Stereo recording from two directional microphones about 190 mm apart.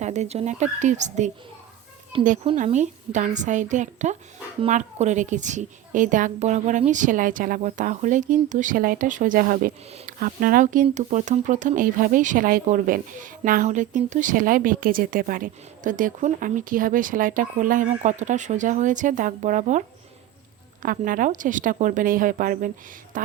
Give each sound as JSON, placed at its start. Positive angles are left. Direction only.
{"t": 0.0, "sound": "a woman's voice", "side_deg": -35}
{"t": 20.8, "sound": "speech", "side_deg": -45}